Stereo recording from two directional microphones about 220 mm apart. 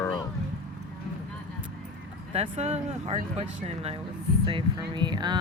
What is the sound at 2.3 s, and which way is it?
Speech, 30° right (ahead or behind).